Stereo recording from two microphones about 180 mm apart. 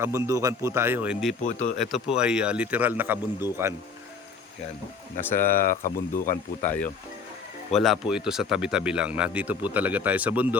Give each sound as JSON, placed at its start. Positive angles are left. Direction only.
{"t": 0.0, "sound": "speech", "side_deg": -15}
{"t": 1.5, "sound": "speech", "side_deg": 40}
{"t": 1.8, "sound": "speech", "side_deg": 0}
{"t": 5.2, "sound": "speech", "side_deg": 10}
{"t": 5.6, "sound": "speech", "side_deg": 50}
{"t": 7.7, "sound": "speech", "side_deg": 0}